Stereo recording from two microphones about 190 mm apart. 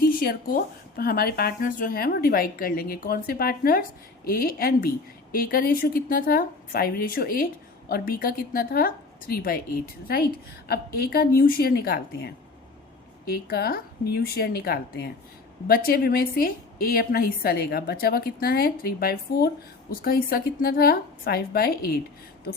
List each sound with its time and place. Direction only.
0.0 s a woman's voice: 50° left (ahead or behind)